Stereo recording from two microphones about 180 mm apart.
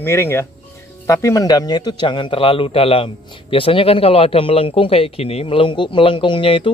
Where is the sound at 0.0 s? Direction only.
15° left (ahead or behind).